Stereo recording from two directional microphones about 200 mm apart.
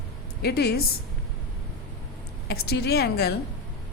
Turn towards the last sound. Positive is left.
turn(degrees=55)  # may be behind; listen again after turning